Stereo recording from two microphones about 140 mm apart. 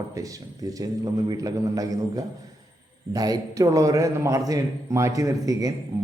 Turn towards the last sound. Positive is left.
turn(degrees=-25)  # may be behind; listen again after turning